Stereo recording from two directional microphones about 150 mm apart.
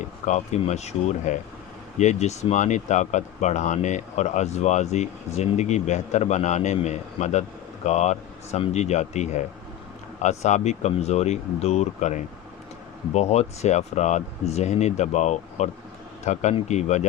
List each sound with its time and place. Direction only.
0.3 s speech: 50° left (ahead or behind)